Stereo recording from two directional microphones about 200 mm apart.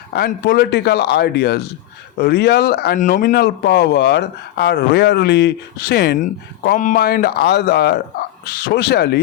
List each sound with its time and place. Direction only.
0.1 s speech: 55° left (ahead or behind)
6.1 s speech: 45° left (ahead or behind)